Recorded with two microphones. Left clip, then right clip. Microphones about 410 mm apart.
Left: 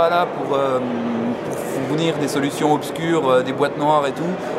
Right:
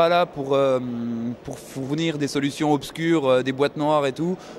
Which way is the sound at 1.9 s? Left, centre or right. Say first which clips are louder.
Left 3 dB; right.